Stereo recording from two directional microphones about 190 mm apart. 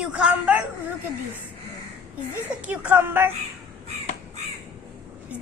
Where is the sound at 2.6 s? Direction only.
10° right (ahead or behind).